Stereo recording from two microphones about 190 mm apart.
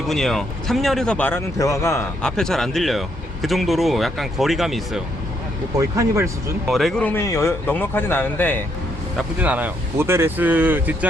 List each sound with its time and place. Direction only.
0.1 s speech: centre (ahead or behind)
2.2 s speech: 5° left (ahead or behind)
5.8 s speech: 15° right (ahead or behind)
6.7 s speech: centre (ahead or behind)
9.1 s speech: 5° right (ahead or behind)